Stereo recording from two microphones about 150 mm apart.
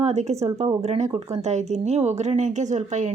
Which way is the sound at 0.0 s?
45° right (ahead or behind).